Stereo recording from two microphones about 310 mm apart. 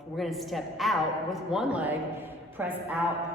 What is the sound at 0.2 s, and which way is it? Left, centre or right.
A woman's voice, centre.